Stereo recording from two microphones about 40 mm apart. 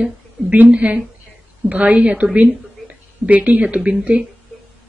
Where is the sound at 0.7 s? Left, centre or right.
Right.